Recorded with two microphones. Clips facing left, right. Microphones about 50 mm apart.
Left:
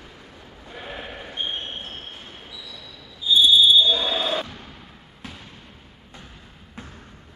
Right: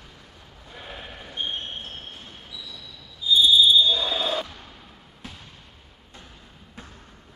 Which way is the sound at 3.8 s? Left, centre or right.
Left.